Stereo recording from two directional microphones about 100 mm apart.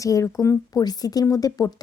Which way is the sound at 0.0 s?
35° left (ahead or behind).